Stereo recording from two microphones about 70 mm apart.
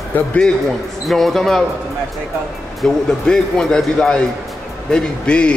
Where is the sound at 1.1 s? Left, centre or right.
Centre.